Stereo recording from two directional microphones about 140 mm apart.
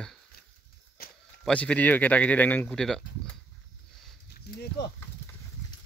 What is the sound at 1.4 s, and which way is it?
Speech, 10° left (ahead or behind).